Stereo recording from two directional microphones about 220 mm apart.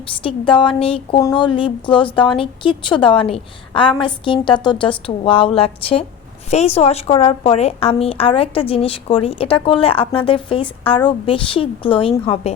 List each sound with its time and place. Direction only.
0.2 s a woman's voice: 25° left (ahead or behind)